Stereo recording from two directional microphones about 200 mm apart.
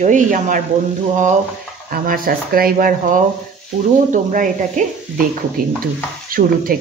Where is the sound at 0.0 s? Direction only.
40° right (ahead or behind).